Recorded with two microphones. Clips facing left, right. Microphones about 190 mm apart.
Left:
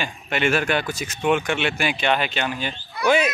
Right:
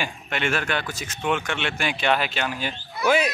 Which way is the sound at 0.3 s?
10° left (ahead or behind).